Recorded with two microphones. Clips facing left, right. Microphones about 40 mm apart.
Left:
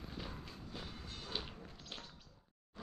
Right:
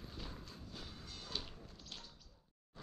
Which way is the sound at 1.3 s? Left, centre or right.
Left.